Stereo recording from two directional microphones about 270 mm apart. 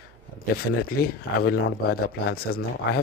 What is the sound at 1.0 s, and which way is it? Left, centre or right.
Speech, left.